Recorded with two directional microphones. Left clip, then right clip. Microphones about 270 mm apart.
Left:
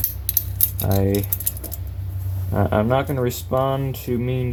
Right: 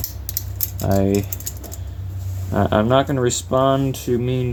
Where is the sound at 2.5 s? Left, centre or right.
Right.